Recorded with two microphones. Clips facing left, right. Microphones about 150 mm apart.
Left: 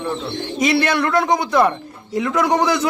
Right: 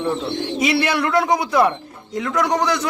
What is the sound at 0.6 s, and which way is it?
A man's voice, 5° right (ahead or behind).